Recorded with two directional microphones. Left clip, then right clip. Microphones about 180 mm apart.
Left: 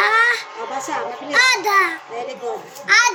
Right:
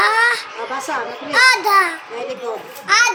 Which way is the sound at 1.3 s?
20° left (ahead or behind).